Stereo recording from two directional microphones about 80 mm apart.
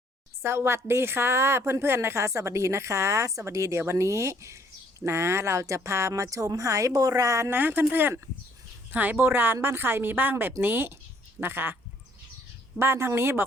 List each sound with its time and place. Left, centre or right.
0.4 s a woman's voice: right
12.8 s a woman's voice: right